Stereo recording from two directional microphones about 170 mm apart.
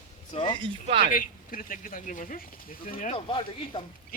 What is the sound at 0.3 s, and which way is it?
Speech, 30° left (ahead or behind).